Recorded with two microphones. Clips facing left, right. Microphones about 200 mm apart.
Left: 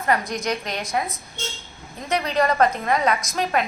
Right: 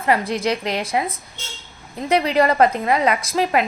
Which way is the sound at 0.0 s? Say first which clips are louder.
Right 4 dB; 30° right (ahead or behind).